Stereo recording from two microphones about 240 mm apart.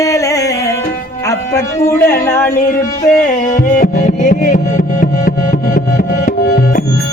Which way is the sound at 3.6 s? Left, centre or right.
Left.